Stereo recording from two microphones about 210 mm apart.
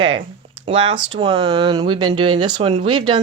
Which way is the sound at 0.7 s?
25° right (ahead or behind).